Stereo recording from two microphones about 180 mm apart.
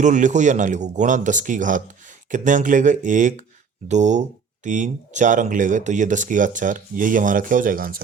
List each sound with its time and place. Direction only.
0.0 s speech: 45° right (ahead or behind)